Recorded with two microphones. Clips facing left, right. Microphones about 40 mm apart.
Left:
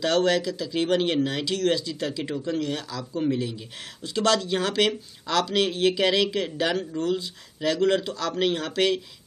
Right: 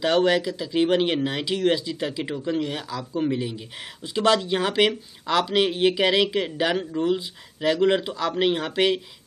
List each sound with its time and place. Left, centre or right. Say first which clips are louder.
0.0 s speech: right 2 dB; centre